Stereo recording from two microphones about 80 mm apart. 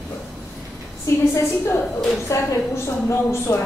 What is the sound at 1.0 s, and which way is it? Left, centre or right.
A woman's voice, left.